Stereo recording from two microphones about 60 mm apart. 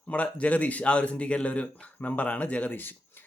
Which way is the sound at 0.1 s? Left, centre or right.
Left.